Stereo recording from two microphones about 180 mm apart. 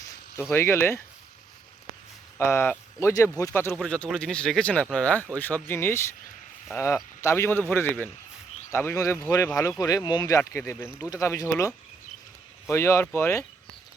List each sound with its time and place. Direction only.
0.5 s speech: 15° left (ahead or behind)
2.4 s speech: 15° left (ahead or behind)